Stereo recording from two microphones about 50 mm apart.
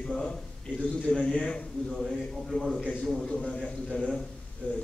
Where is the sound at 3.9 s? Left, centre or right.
Centre.